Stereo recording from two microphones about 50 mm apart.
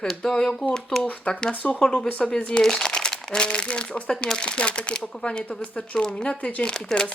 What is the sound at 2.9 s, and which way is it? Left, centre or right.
Crumpling, centre.